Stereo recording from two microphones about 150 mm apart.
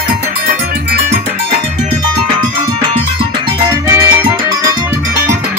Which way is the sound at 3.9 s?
20° right (ahead or behind).